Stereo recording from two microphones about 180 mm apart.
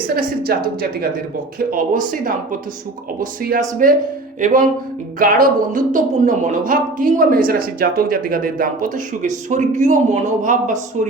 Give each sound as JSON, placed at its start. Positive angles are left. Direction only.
{"t": 1.5, "sound": "speech", "side_deg": -50}
{"t": 3.2, "sound": "speech", "side_deg": -50}